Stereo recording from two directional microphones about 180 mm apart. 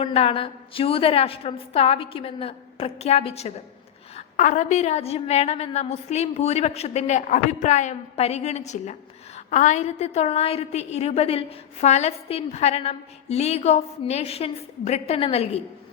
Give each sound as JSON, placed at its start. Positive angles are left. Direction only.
{"t": 0.0, "sound": "a woman's voice", "side_deg": 30}